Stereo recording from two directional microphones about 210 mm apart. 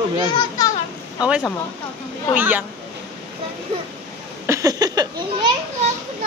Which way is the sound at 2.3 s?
10° right (ahead or behind).